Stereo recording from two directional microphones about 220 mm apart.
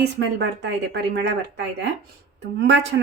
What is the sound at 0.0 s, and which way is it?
Speech, 50° right (ahead or behind).